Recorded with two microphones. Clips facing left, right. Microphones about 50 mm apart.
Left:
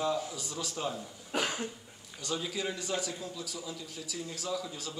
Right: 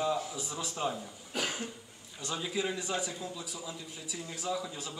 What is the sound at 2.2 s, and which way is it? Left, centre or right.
A man's voice, centre.